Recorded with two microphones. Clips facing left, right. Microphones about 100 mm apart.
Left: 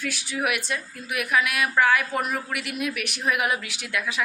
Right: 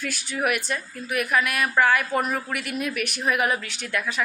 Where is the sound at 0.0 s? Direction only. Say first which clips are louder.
Right 1 dB; centre (ahead or behind).